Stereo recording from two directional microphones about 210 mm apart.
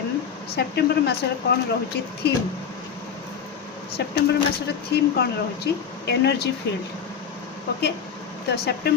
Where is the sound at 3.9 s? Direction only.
50° left (ahead or behind).